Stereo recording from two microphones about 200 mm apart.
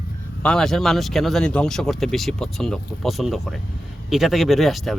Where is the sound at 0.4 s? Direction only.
5° left (ahead or behind).